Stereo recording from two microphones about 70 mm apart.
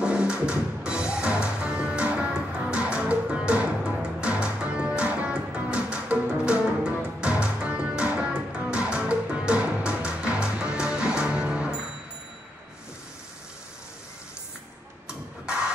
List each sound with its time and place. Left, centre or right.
0.0 s music: centre